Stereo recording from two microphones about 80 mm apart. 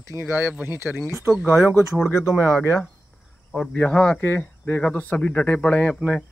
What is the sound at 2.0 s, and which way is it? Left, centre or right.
Speech, left.